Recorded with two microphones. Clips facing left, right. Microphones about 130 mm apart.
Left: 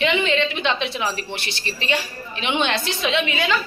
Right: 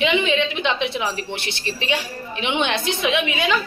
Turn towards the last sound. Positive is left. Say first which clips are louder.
# right 1 dB
turn(degrees=-15)  # may be behind; listen again after turning